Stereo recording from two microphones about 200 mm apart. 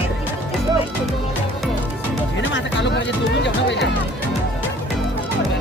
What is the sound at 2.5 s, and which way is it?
Music, 65° left (ahead or behind).